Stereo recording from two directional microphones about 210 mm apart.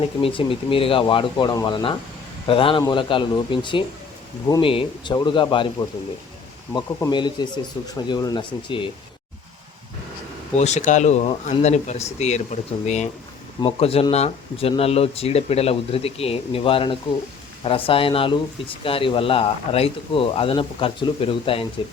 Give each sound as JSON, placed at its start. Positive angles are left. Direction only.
{"t": 0.0, "sound": "speech", "side_deg": 25}
{"t": 6.7, "sound": "speech", "side_deg": 20}
{"t": 10.5, "sound": "speech", "side_deg": 30}